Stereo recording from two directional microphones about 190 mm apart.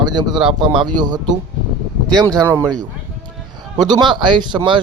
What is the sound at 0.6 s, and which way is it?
Speech, 25° right (ahead or behind).